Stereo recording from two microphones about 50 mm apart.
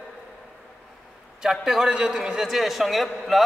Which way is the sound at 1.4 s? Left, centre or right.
Centre.